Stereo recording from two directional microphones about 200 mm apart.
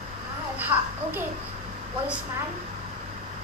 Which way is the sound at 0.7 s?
20° right (ahead or behind).